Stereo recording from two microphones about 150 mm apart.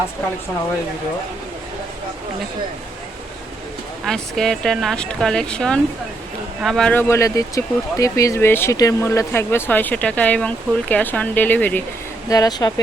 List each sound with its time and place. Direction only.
4.0 s speech: 5° left (ahead or behind)
7.1 s speech: 20° left (ahead or behind)
12.3 s speech: 25° left (ahead or behind)